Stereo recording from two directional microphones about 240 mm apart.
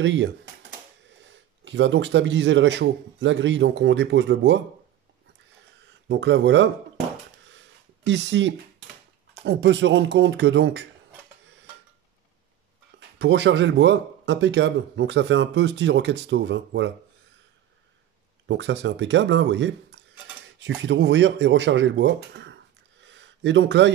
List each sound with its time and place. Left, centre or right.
0.0 s speech: right
6.0 s speech: right
7.5 s a sound: right
9.4 s speech: right
13.2 s speech: right
18.5 s speech: right